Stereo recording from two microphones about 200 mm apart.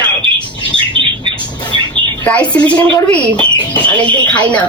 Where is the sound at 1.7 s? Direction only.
25° right (ahead or behind).